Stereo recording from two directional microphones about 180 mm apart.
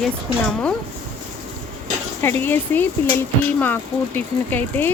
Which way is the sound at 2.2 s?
10° left (ahead or behind).